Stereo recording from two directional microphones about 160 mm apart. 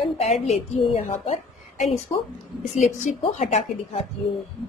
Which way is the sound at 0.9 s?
45° left (ahead or behind).